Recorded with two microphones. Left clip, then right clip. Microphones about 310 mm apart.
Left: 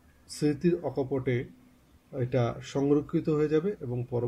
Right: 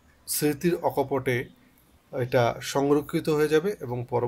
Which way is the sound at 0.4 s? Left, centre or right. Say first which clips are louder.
Right 3 dB; right.